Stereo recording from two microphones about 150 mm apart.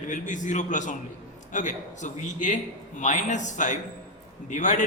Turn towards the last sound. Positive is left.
turn(degrees=55)  # may be behind; listen again after turning